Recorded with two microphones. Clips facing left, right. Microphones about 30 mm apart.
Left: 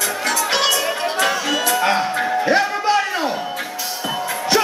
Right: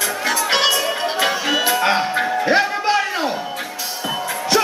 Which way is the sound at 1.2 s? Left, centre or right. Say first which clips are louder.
Right 1 dB; centre.